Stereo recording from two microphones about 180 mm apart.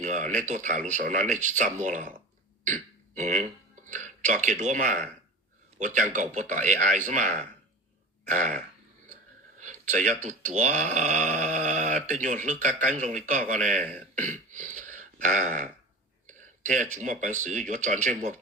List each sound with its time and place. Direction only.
0.0 s a man's voice: 40° right (ahead or behind)
9.6 s a man's voice: 45° right (ahead or behind)